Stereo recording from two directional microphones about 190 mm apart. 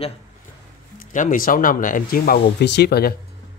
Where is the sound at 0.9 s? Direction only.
45° left (ahead or behind).